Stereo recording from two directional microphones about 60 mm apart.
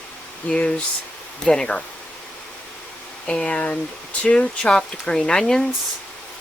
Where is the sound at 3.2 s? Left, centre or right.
Centre.